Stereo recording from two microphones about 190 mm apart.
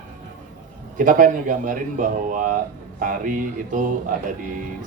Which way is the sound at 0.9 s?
45° right (ahead or behind).